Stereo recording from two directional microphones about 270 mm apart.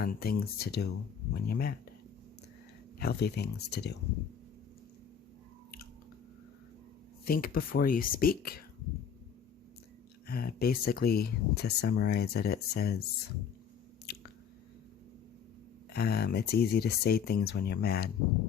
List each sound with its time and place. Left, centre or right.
0.0 s speech: left
3.0 s speech: left
7.3 s speech: left
10.2 s speech: left
14.1 s squish: left
15.9 s speech: left